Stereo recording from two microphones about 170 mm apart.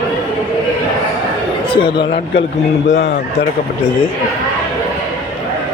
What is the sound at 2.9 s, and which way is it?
Speech, 90° left.